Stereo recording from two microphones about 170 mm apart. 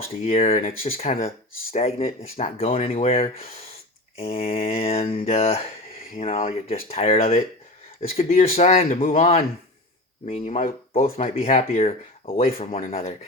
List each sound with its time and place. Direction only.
0.3 s speech: 35° left (ahead or behind)
0.6 s speech: 55° left (ahead or behind)
0.9 s speech: 40° left (ahead or behind)
8.9 s speech: 50° left (ahead or behind)
10.2 s speech: 40° left (ahead or behind)